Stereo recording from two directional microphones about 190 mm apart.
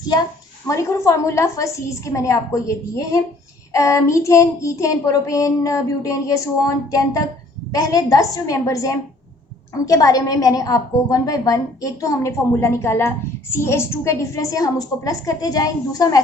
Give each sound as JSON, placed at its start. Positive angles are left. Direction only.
{"t": 0.7, "sound": "a woman's voice", "side_deg": 15}